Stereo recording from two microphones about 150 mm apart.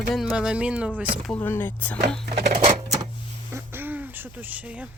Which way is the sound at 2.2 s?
75° right (ahead or behind).